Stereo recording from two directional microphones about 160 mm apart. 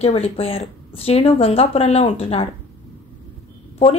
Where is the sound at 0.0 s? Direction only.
40° left (ahead or behind).